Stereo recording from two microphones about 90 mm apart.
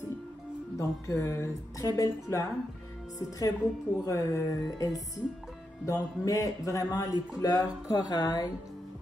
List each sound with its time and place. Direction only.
0.7 s a man's voice: 35° left (ahead or behind); by 8.5 s 50° left (ahead or behind)